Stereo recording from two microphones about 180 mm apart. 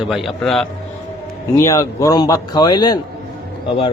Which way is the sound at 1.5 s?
15° left (ahead or behind).